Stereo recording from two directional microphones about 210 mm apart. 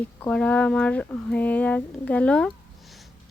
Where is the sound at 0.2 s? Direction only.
5° left (ahead or behind).